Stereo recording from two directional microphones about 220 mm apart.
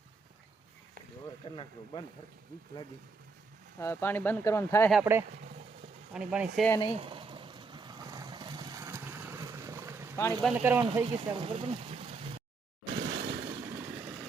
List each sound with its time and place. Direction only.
1.5 s speech: 20° left (ahead or behind)
3.8 s speech: 10° left (ahead or behind)
4.9 s speech: 5° right (ahead or behind)
6.7 s speech: 20° left (ahead or behind)
6.9 s vehicle: 25° right (ahead or behind)
10.4 s speech: 10° right (ahead or behind)
10.9 s speech: 20° right (ahead or behind)
12.9 s a sound: 55° right (ahead or behind)
13.5 s vehicle: 15° right (ahead or behind)